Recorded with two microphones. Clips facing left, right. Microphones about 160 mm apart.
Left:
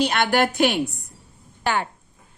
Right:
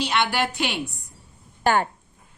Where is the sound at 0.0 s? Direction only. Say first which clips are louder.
Left 4 dB; 50° left (ahead or behind).